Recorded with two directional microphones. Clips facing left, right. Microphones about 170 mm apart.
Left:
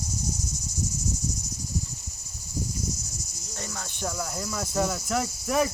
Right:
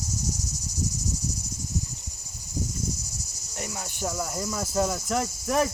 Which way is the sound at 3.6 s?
10° right (ahead or behind).